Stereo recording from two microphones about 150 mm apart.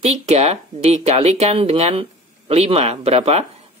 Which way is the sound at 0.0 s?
45° right (ahead or behind).